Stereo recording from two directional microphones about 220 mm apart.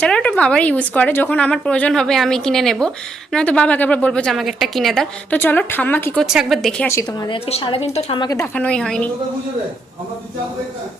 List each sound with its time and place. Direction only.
0.0 s a woman's voice: 5° left (ahead or behind)
6.2 s a woman's voice: centre (ahead or behind); by 8.4 s 20° left (ahead or behind)
8.5 s a woman's voice: 5° left (ahead or behind)